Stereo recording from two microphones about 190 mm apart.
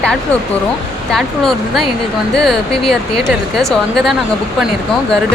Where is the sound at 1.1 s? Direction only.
Centre (ahead or behind).